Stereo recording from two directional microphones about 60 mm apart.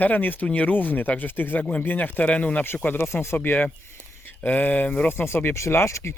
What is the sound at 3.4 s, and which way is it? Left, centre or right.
Speech, left.